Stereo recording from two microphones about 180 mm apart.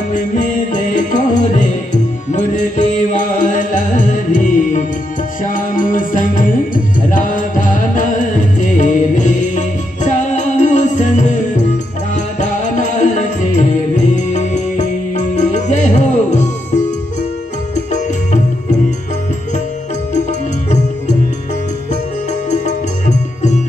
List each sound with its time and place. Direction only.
0.1 s music: 45° left (ahead or behind)
22.5 s music: 40° left (ahead or behind)